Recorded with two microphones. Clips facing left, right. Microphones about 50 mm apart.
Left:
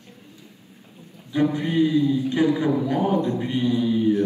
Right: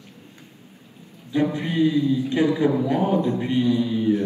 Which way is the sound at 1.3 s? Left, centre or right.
Right.